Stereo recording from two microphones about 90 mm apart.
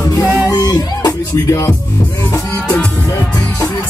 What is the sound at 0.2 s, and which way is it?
Music, 45° left (ahead or behind).